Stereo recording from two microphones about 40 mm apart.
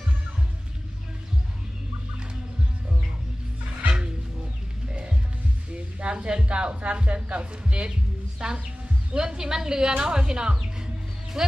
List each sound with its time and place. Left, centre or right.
4.9 s music: right
5.7 s a sound: right
6.4 s speech: right